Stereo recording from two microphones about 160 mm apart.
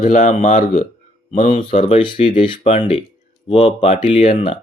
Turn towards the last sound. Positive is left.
turn(degrees=40)  # may be behind; listen again after turning